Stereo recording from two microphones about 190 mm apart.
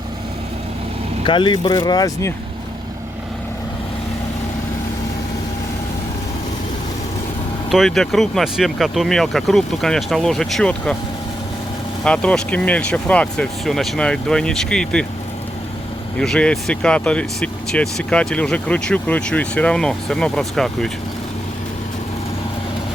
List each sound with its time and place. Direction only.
1.2 s speech: 25° left (ahead or behind)
7.7 s speech: centre (ahead or behind)
12.0 s speech: 5° left (ahead or behind)
16.1 s speech: 5° left (ahead or behind)